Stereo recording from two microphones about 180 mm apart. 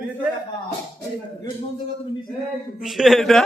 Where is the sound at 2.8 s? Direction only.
Centre (ahead or behind).